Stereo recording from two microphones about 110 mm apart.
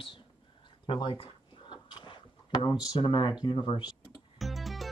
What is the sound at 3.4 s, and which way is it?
Speech, 45° left (ahead or behind).